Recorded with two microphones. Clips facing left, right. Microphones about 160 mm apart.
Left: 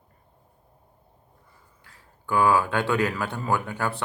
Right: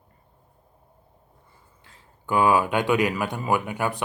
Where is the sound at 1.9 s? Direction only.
20° right (ahead or behind).